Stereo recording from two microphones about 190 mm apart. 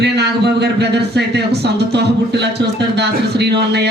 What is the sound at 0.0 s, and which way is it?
A man's voice, 60° right (ahead or behind).